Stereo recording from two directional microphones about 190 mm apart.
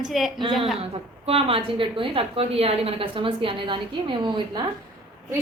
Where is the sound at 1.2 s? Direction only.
30° right (ahead or behind).